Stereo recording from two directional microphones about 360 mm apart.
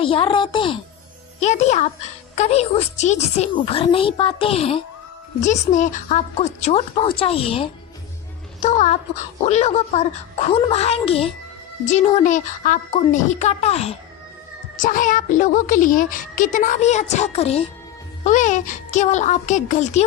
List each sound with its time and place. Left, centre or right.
0.0 s a child's voice: centre